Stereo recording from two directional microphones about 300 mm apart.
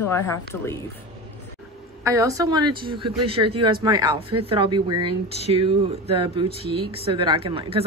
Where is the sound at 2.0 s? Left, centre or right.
Centre.